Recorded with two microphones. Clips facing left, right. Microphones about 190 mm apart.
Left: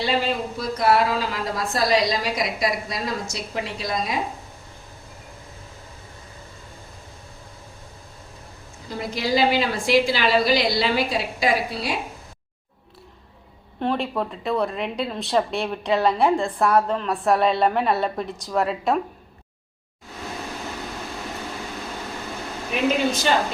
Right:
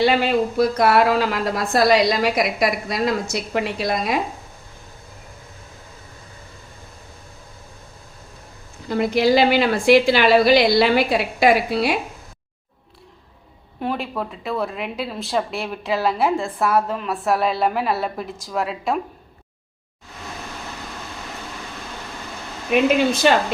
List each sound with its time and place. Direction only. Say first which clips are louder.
0.0 s speech: right 6 dB; 65° right (ahead or behind)
8.9 s speech: right 7 dB; 65° right (ahead or behind)
13.7 s a woman's voice: left 1 dB; 5° right (ahead or behind)